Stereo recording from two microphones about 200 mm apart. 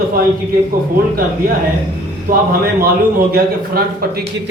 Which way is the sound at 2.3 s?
45° right (ahead or behind).